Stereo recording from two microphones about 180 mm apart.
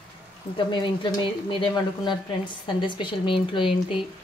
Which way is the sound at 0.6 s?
25° left (ahead or behind).